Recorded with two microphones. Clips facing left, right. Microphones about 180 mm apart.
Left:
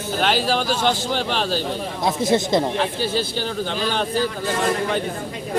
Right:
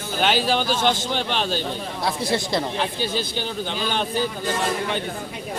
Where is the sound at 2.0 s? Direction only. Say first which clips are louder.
Left 5 dB; 20° left (ahead or behind).